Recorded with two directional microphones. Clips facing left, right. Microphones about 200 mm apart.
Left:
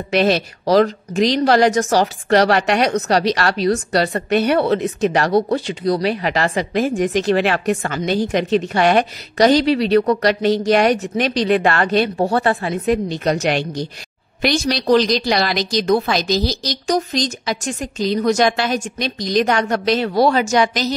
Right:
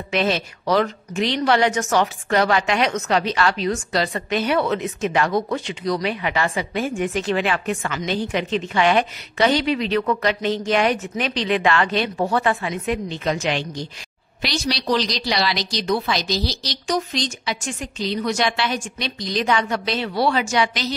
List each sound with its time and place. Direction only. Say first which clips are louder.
0.1 s a woman's voice: left 5 dB; 35° left (ahead or behind)